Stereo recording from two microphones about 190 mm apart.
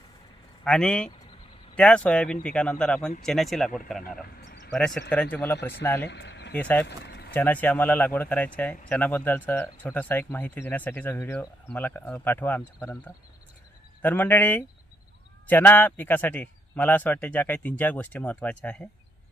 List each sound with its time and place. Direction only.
0.6 s speech: 5° left (ahead or behind)
6.1 s speech: 65° left (ahead or behind)
6.6 s speech: 5° left (ahead or behind)
6.8 s speech: 60° left (ahead or behind)
7.3 s speech: 10° left (ahead or behind)
14.0 s speech: 10° left (ahead or behind)